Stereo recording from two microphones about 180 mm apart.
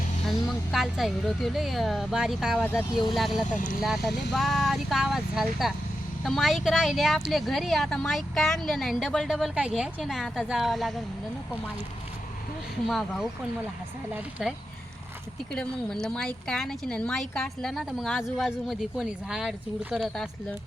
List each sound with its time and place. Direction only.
0.3 s speech: centre (ahead or behind)
3.5 s speech: 45° left (ahead or behind)
3.8 s speech: centre (ahead or behind)
12.9 s speech: centre (ahead or behind)
16.0 s speech: 5° left (ahead or behind)